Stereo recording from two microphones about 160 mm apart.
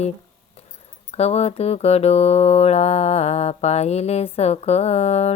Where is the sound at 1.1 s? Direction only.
40° left (ahead or behind).